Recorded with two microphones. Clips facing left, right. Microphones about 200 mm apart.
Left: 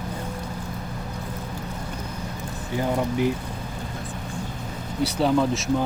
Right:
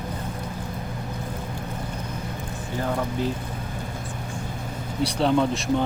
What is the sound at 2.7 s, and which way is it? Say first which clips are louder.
Speech: left 3 dB; 15° left (ahead or behind).